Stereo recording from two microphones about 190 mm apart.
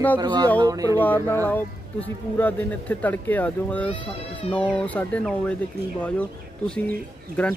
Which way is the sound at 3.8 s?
30° left (ahead or behind).